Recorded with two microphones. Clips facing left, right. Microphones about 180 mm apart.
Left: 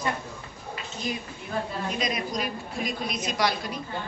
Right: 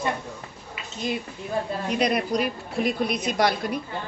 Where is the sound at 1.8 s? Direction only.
65° right (ahead or behind).